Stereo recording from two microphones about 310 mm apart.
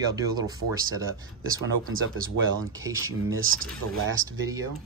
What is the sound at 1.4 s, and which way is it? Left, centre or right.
Speech, right.